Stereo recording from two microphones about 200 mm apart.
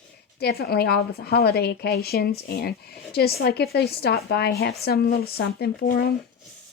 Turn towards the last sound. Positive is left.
turn(degrees=55)  # may be behind; listen again after turning